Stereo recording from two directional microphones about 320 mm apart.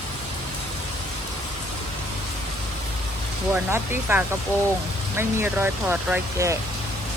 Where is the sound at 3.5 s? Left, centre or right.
Centre.